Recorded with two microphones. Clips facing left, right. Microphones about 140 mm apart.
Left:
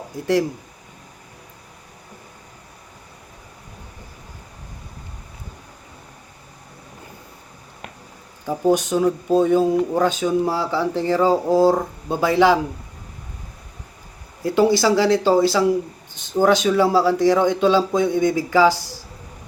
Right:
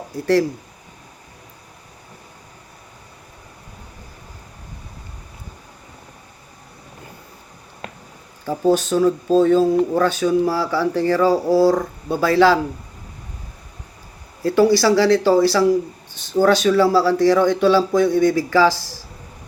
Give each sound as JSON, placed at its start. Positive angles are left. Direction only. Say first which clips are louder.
{"t": 8.4, "sound": "a man's voice", "louder": "right 1 dB", "side_deg": 15}
{"t": 14.4, "sound": "a man's voice", "louder": "right 2 dB", "side_deg": 20}